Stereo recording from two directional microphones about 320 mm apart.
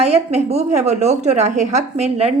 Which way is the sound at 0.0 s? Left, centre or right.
Centre.